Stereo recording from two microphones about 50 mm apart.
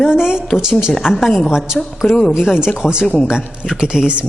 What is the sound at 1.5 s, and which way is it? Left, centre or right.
Speech, centre.